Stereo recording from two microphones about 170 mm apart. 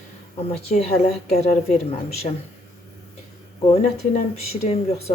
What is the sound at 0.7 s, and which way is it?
Speech, 50° left (ahead or behind).